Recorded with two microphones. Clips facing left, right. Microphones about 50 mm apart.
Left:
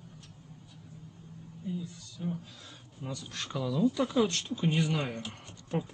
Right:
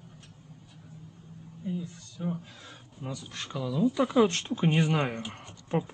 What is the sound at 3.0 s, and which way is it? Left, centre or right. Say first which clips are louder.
Speech: right 1 dB; centre.